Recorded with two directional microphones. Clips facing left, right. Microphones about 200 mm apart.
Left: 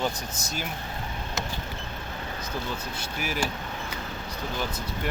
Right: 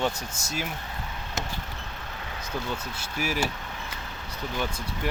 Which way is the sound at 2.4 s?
5° right (ahead or behind).